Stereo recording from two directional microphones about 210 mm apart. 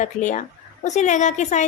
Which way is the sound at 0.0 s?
35° left (ahead or behind).